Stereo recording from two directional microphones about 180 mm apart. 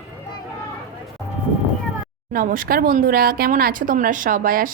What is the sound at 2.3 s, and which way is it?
Speech, 50° right (ahead or behind).